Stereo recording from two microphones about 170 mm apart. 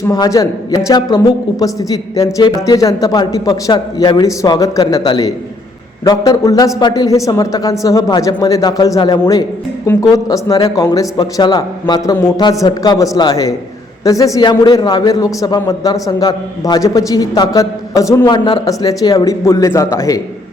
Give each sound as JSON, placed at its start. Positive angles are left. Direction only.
{"t": 0.1, "sound": "a man's voice", "side_deg": 20}